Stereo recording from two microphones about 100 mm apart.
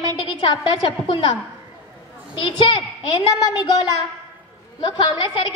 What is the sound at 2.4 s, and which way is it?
A woman's voice, 65° left (ahead or behind).